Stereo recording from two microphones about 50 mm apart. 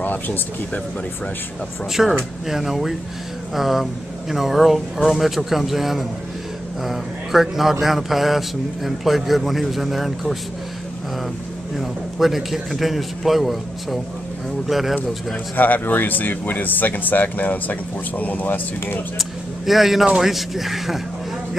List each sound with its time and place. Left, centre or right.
0.0 s a sound: left
1.9 s speech: centre
11.7 s speech: centre
15.5 s speech: left
19.1 s speech: centre